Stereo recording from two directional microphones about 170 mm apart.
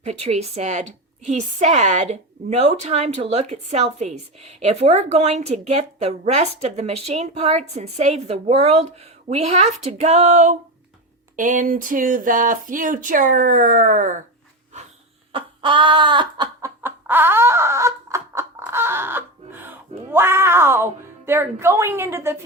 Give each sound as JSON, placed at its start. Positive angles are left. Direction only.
{"t": 0.0, "sound": "a woman's voice", "side_deg": -40}
{"t": 15.3, "sound": "chicken", "side_deg": -30}
{"t": 20.1, "sound": "speech", "side_deg": -15}